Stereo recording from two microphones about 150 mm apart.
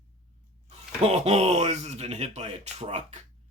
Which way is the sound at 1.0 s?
45° right (ahead or behind).